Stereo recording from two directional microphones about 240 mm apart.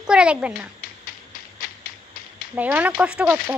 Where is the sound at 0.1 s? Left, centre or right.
Centre.